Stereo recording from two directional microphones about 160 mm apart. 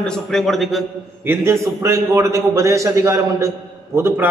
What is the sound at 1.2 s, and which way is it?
A man's voice, 15° right (ahead or behind).